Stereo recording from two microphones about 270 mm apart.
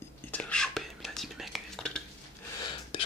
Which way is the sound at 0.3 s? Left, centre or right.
Centre.